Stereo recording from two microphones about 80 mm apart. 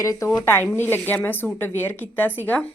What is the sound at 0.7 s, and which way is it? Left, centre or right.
Speech, left.